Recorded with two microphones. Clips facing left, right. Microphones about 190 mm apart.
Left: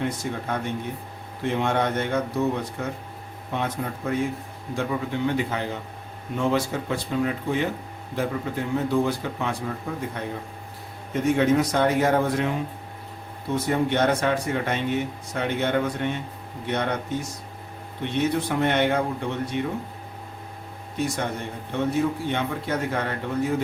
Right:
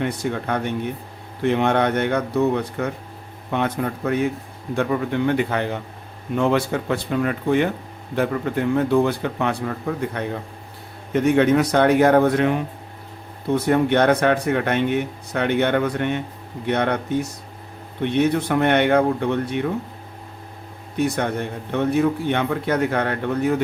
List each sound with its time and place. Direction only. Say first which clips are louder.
0.0 s speech: right 4 dB; 65° right (ahead or behind)
20.9 s speech: right 5 dB; 60° right (ahead or behind)